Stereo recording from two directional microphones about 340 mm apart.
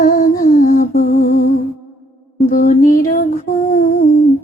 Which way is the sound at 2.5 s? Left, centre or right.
Left.